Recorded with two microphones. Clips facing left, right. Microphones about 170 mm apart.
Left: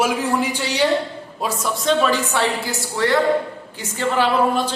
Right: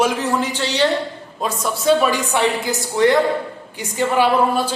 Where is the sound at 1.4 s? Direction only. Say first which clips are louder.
Right 1 dB; centre (ahead or behind).